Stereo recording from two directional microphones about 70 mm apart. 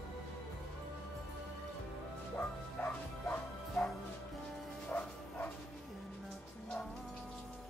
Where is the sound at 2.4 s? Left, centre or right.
Left.